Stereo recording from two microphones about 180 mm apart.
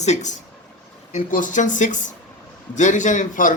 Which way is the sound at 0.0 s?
40° left (ahead or behind).